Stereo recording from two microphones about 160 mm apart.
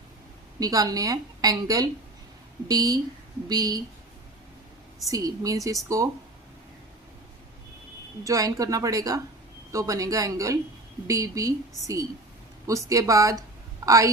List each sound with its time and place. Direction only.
0.6 s a woman's voice: 20° right (ahead or behind)
5.1 s a woman's voice: 20° right (ahead or behind)
8.2 s a woman's voice: 20° right (ahead or behind)